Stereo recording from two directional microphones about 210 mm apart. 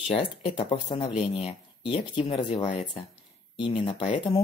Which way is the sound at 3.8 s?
25° left (ahead or behind).